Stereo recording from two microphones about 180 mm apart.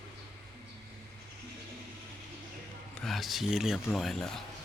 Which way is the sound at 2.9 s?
Centre (ahead or behind).